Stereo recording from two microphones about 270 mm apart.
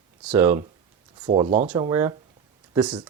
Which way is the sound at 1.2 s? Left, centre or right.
Right.